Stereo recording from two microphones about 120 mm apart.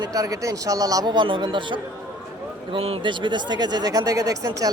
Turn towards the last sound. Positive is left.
turn(degrees=-30)  # may be behind; listen again after turning